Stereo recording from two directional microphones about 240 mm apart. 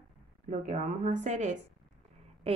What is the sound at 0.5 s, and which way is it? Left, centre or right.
Speech, right.